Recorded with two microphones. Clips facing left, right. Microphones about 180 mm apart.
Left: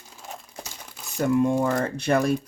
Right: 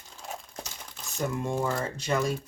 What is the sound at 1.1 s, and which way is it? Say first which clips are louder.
Speech: left 9 dB; 65° left (ahead or behind).